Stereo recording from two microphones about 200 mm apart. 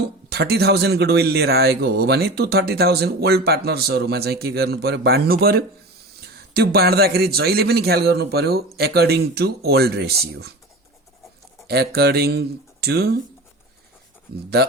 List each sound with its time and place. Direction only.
0.0 s a man's voice: 55° right (ahead or behind)
11.7 s a man's voice: 55° right (ahead or behind)
14.6 s a man's voice: 55° right (ahead or behind)